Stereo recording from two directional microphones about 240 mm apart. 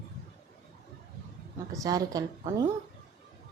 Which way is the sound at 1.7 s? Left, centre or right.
Centre.